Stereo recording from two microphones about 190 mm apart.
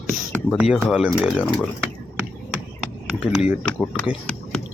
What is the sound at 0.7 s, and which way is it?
Speech, centre (ahead or behind).